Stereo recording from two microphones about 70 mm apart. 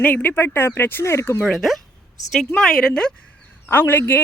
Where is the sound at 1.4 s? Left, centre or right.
Centre.